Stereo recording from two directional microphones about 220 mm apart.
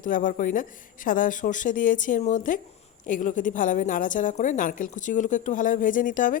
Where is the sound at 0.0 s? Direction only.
35° left (ahead or behind).